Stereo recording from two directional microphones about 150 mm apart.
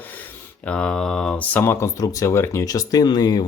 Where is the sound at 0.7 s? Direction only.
5° left (ahead or behind).